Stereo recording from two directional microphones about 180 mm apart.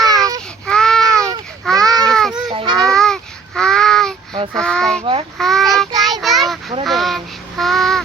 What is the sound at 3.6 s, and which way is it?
Babbling, 5° left (ahead or behind).